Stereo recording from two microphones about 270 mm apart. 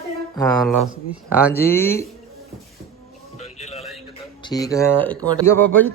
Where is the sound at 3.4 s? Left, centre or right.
Left.